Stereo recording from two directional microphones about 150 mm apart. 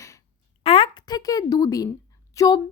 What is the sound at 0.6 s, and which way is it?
Speech, 40° left (ahead or behind).